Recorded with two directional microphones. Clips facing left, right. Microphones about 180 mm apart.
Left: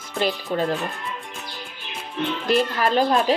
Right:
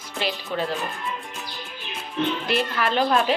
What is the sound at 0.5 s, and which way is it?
Speech, 35° left (ahead or behind).